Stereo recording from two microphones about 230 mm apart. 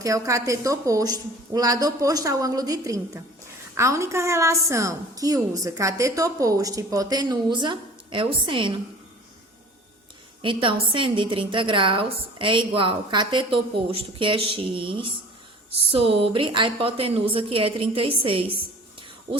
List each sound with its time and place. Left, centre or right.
0.0 s a woman's voice: centre
10.4 s a woman's voice: right
19.3 s a sound: right